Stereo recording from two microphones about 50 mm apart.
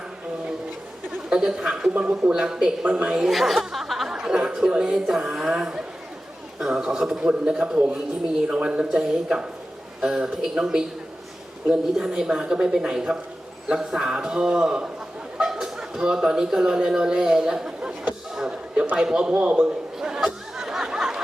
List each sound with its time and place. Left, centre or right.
1.3 s a woman's voice: centre
1.9 s speech: right
2.4 s a woman's voice: centre
3.2 s speech: centre
4.1 s a woman's voice: centre
8.5 s speech: right
8.8 s a woman's voice: centre
11.9 s a woman's voice: centre
18.3 s a sound: centre
18.9 s a woman's voice: centre
20.0 s a sound: centre